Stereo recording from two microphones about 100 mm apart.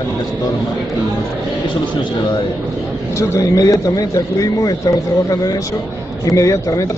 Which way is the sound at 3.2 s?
35° left (ahead or behind).